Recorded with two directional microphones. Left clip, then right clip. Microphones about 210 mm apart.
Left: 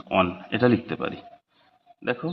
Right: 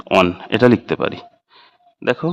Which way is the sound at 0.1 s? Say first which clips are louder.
Right 8 dB; 45° right (ahead or behind).